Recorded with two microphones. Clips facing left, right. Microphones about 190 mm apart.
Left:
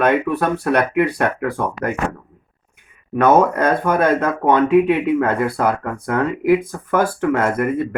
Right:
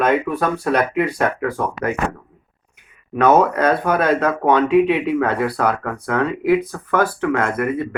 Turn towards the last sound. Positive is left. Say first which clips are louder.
# left 2 dB
turn(degrees=50)  # may be behind; listen again after turning